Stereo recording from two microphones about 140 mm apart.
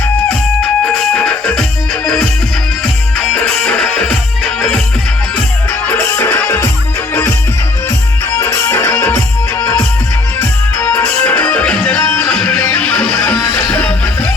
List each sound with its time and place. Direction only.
1.1 s music: 5° left (ahead or behind)
5.8 s music: 15° left (ahead or behind)
8.4 s music: 15° left (ahead or behind)
10.8 s music: 10° left (ahead or behind)